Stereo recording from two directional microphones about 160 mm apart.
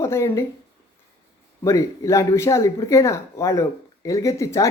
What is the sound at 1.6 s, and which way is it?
Speech, 20° left (ahead or behind).